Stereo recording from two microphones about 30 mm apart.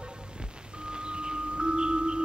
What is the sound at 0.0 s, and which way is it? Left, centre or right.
Music, right.